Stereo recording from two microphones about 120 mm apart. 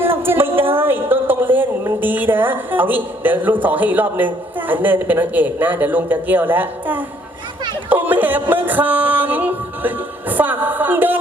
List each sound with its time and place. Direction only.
0.0 s a sound: 20° right (ahead or behind)
4.7 s a man's voice: 15° right (ahead or behind)
7.9 s music: 15° right (ahead or behind)